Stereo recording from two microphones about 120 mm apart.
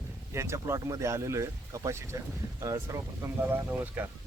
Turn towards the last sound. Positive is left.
turn(degrees=-15)  # may be behind; listen again after turning